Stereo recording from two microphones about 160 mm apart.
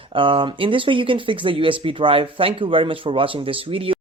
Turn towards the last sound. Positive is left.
turn(degrees=-35)  # may be behind; listen again after turning